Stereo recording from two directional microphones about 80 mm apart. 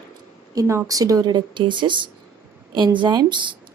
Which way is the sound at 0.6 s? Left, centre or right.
Right.